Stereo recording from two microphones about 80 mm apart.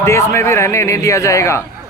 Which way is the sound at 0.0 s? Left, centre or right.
Left.